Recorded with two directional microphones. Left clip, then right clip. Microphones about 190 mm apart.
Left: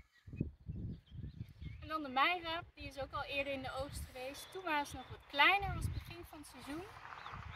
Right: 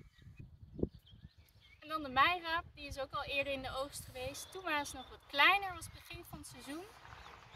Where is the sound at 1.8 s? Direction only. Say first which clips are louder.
Right 3 dB; 5° right (ahead or behind).